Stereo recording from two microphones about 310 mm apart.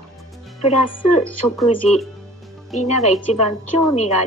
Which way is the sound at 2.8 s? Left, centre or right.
Left.